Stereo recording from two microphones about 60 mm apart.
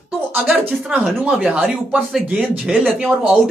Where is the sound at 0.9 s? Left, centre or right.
Centre.